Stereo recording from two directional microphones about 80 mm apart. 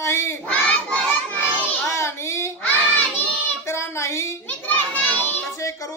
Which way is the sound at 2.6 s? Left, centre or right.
Centre.